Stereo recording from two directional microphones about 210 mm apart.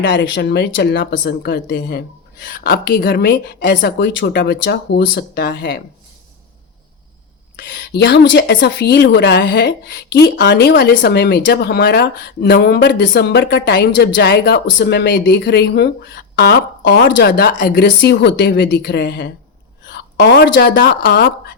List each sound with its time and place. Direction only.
0.0 s a woman's voice: 60° left (ahead or behind)
7.7 s a woman's voice: 55° left (ahead or behind)
17.8 s a woman's voice: 55° left (ahead or behind)